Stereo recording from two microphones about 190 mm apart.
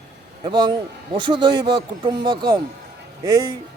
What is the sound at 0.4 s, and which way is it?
A man's voice, 25° right (ahead or behind).